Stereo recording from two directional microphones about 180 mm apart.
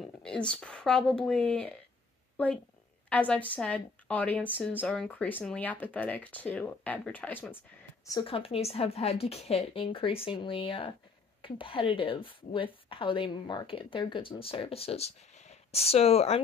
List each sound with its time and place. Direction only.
0.2 s a woman's voice: 5° left (ahead or behind)
8.1 s a woman's voice: 25° left (ahead or behind)